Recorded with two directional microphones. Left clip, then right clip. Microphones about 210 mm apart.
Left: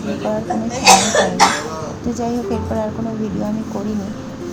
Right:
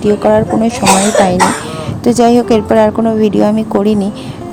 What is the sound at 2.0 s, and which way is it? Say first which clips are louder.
A woman's voice: right 15 dB; 50° right (ahead or behind).